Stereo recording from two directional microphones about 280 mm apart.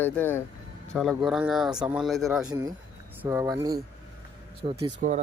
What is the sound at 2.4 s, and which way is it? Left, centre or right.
Speech, centre.